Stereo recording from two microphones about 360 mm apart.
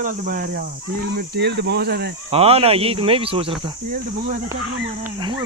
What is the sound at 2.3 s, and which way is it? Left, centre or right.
Speech, centre.